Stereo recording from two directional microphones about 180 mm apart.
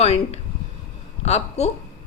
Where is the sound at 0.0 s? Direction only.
35° left (ahead or behind).